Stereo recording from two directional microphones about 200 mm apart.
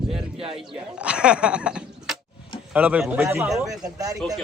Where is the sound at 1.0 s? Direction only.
5° right (ahead or behind).